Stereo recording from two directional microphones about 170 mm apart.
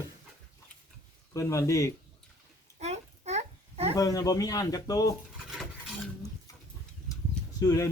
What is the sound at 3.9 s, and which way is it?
Speech, 20° left (ahead or behind).